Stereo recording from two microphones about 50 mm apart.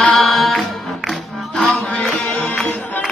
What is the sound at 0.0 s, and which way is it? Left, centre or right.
Music, centre.